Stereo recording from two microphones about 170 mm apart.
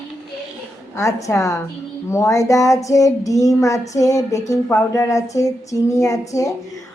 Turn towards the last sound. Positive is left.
turn(degrees=20)  # may be behind; listen again after turning